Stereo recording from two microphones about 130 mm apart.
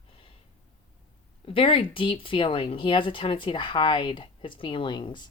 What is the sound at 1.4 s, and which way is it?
Speech, 40° left (ahead or behind).